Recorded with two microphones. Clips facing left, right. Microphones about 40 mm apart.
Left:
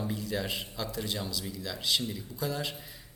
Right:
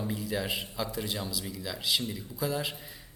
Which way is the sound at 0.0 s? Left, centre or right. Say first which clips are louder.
Right 1 dB; centre.